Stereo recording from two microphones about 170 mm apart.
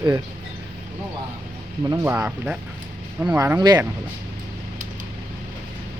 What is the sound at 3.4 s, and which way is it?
Speech, 20° right (ahead or behind).